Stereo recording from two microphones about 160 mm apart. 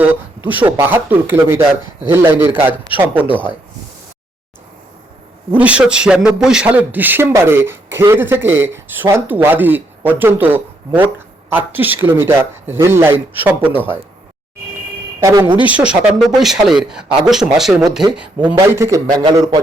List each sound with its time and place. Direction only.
0.0 s a man's voice: 10° right (ahead or behind)
5.5 s a man's voice: 10° right (ahead or behind)
15.2 s speech: 20° right (ahead or behind)
15.6 s speech: 10° right (ahead or behind)
18.4 s a man's voice: 15° right (ahead or behind)